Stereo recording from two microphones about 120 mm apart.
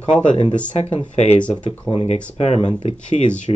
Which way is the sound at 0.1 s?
10° left (ahead or behind).